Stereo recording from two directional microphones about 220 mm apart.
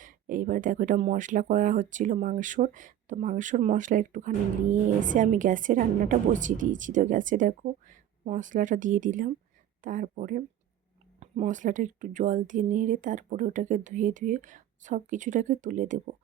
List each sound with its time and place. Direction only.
0.0 s speech: 35° right (ahead or behind)